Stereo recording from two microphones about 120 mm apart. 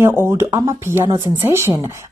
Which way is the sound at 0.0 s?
20° right (ahead or behind).